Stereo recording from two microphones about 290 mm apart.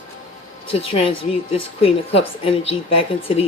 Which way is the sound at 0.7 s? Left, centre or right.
Centre.